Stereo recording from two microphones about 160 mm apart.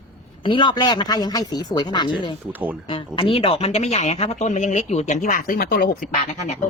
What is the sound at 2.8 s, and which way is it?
Speech, 30° left (ahead or behind).